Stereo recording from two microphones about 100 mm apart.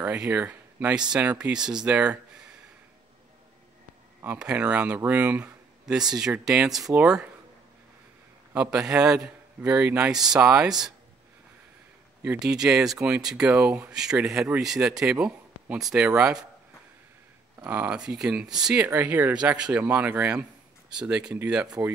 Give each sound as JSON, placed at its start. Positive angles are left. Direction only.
{"t": 0.0, "sound": "speech", "side_deg": -15}
{"t": 1.9, "sound": "a sound", "side_deg": -10}
{"t": 4.4, "sound": "speech", "side_deg": -10}
{"t": 8.5, "sound": "speech", "side_deg": -10}
{"t": 12.4, "sound": "speech", "side_deg": -5}
{"t": 17.6, "sound": "speech", "side_deg": -15}
{"t": 21.8, "sound": "speech", "side_deg": -30}